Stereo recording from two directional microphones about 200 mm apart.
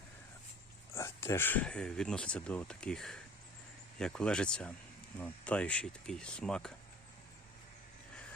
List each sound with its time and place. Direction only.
0.9 s speech: 10° left (ahead or behind)